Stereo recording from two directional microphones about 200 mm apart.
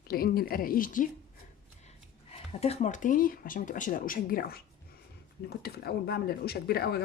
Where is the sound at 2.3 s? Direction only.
30° left (ahead or behind).